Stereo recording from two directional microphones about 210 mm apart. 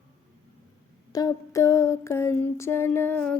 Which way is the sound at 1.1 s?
15° left (ahead or behind).